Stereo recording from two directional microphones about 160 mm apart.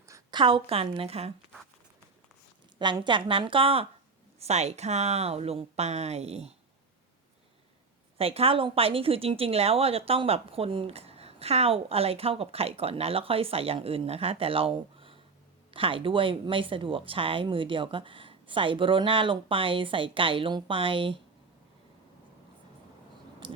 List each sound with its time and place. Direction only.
0.1 s a woman's voice: 30° right (ahead or behind)
2.7 s a woman's voice: 30° right (ahead or behind)
8.2 s speech: 35° right (ahead or behind)